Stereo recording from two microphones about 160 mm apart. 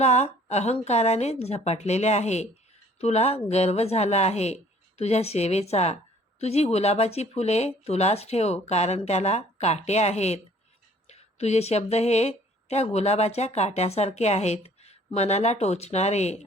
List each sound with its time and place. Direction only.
0.0 s speech: 45° left (ahead or behind)